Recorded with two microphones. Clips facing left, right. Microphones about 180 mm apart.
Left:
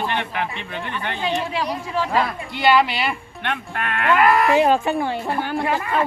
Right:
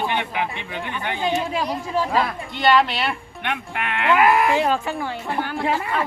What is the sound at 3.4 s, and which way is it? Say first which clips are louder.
Speech: left 1 dB; 10° right (ahead or behind).